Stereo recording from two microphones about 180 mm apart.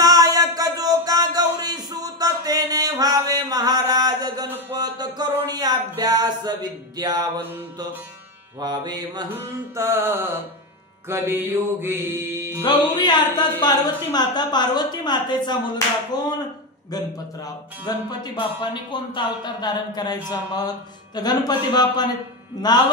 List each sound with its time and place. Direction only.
0.0 s a sound: 20° right (ahead or behind)
7.0 s music: 20° right (ahead or behind)
8.5 s music: 20° right (ahead or behind)
9.8 s mantra: 15° right (ahead or behind)
12.6 s speech: 25° left (ahead or behind)
17.5 s speech: 20° left (ahead or behind)